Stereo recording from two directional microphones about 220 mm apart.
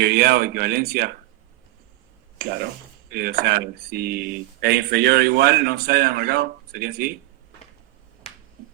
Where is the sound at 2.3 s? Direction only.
45° right (ahead or behind).